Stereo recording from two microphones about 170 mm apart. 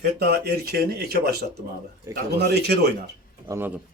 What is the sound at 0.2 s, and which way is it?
Speech, 75° right (ahead or behind).